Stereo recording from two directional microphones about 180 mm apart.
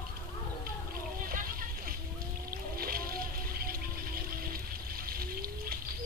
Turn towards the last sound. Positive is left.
turn(degrees=-55)  # may be behind; listen again after turning